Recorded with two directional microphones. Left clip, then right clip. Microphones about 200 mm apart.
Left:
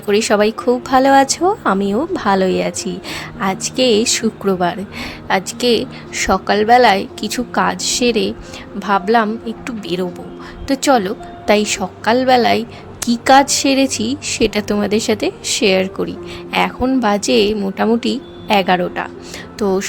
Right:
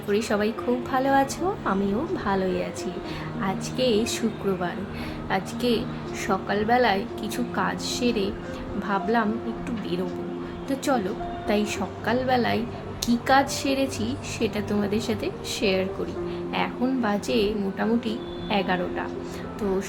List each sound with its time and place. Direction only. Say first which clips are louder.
0.1 s a woman's voice: left 11 dB; 50° left (ahead or behind)